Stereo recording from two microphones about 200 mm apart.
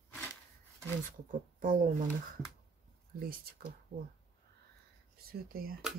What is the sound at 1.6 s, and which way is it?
Speech, 45° right (ahead or behind).